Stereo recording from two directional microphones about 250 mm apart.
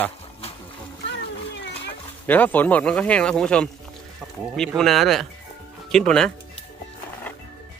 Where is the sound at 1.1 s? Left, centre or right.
Left.